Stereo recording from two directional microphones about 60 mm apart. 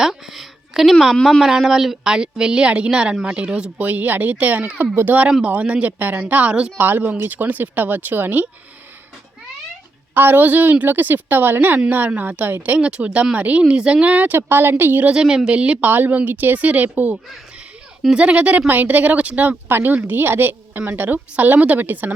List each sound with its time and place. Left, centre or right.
0.0 s a sound: centre
1.1 s speech: centre
6.7 s speech: right
10.2 s a woman's voice: right
14.3 s a woman's voice: right
15.1 s speech: centre
15.9 s a woman's voice: right